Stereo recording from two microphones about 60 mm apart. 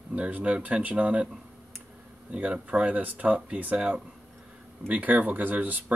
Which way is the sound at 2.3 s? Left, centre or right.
Right.